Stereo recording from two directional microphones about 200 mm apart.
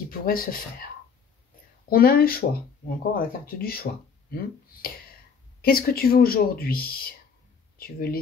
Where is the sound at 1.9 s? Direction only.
45° left (ahead or behind).